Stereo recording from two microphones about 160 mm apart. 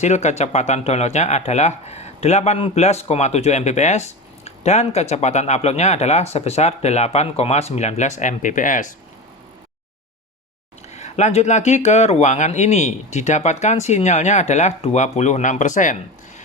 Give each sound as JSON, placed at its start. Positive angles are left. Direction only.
{"t": 0.0, "sound": "speech", "side_deg": 45}
{"t": 10.9, "sound": "speech", "side_deg": 45}